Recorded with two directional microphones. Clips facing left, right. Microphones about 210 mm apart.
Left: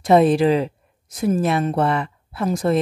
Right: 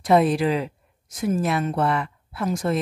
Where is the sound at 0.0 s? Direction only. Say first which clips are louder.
Left 4 dB; 25° left (ahead or behind).